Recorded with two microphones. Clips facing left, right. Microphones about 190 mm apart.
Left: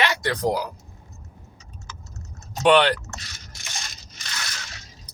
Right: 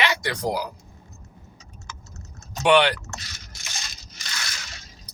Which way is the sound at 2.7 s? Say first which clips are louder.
Even; 10° right (ahead or behind).